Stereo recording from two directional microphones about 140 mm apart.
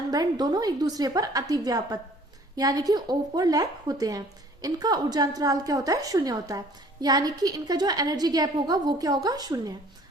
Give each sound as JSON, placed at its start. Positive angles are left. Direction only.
{"t": 0.1, "sound": "a woman's voice", "side_deg": -30}